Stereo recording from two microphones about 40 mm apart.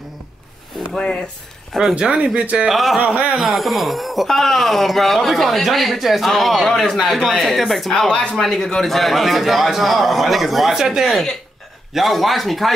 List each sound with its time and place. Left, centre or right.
0.9 s speech: left
1.7 s a man's voice: centre
2.3 s speech: right
2.7 s a man's voice: centre
8.1 s speech: left
8.4 s speech: centre